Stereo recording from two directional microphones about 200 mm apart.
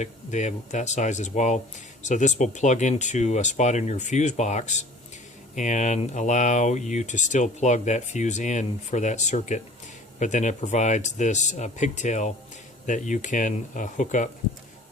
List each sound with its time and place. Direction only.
0.0 s speech: 35° left (ahead or behind)